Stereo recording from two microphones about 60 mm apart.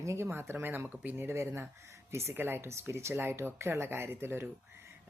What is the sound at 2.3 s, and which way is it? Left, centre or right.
Speech, right.